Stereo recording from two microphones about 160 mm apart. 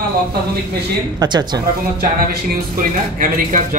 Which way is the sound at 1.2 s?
25° right (ahead or behind).